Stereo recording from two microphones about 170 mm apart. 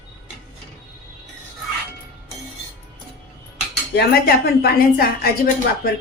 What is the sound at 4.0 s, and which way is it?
A woman's voice, 65° left (ahead or behind).